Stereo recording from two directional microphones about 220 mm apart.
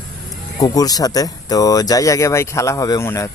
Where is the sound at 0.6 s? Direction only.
15° left (ahead or behind).